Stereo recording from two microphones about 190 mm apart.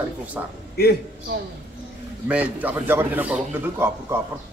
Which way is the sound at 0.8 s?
55° left (ahead or behind).